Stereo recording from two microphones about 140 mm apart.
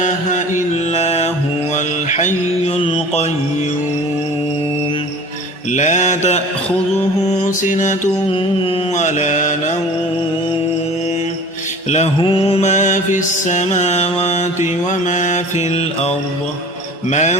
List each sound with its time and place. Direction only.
0.9 s music: 50° left (ahead or behind)
1.7 s mantra: 55° left (ahead or behind)
2.7 s mantra: 45° left (ahead or behind)
5.7 s mantra: 60° left (ahead or behind)
7.3 s mantra: 65° left (ahead or behind)
9.0 s mantra: 60° left (ahead or behind)
11.9 s mantra: 50° left (ahead or behind)
12.2 s mantra: 40° left (ahead or behind); by 17.3 s 60° left (ahead or behind)